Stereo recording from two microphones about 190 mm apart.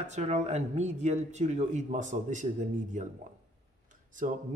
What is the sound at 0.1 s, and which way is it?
Speech, 35° right (ahead or behind).